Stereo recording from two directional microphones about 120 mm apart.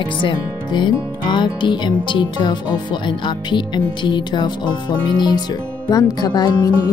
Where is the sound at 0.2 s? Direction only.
40° left (ahead or behind).